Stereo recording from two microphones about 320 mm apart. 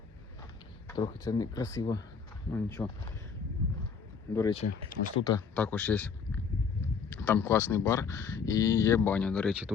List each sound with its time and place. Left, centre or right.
0.9 s speech: centre
4.4 s speech: centre